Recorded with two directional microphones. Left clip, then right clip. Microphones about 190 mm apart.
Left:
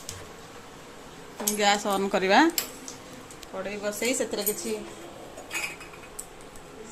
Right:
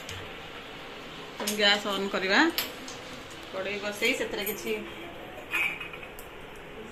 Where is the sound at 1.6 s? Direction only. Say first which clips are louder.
Left 1 dB; 55° left (ahead or behind).